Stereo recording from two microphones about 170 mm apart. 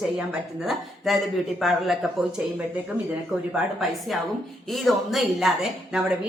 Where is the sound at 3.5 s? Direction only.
Centre (ahead or behind).